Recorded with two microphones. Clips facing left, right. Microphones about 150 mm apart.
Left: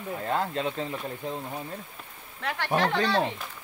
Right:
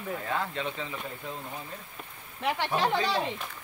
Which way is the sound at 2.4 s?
15° right (ahead or behind).